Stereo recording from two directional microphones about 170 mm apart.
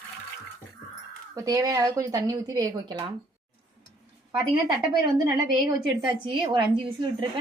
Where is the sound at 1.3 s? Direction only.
20° right (ahead or behind).